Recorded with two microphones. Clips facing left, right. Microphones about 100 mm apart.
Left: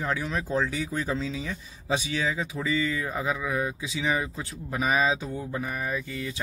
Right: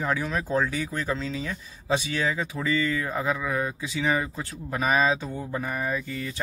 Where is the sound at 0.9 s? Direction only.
15° left (ahead or behind).